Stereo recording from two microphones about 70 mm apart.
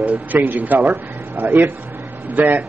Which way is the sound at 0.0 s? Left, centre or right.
Centre.